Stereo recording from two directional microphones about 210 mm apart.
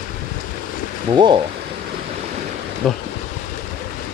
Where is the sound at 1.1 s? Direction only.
20° right (ahead or behind).